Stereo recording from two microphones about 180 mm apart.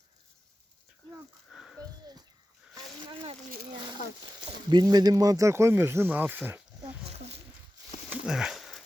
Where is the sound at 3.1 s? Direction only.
30° right (ahead or behind).